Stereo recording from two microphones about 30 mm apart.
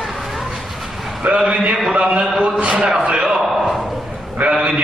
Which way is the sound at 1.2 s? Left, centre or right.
Right.